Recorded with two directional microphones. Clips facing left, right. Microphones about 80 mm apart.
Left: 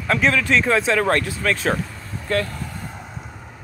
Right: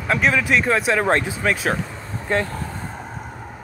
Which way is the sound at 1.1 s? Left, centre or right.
Centre.